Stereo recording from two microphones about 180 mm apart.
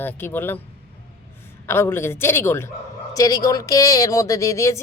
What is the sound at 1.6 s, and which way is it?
A woman's voice, 15° left (ahead or behind).